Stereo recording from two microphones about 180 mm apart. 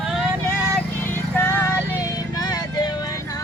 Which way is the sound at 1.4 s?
10° left (ahead or behind).